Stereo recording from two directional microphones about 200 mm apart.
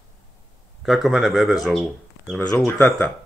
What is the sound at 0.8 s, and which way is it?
Speech, centre (ahead or behind).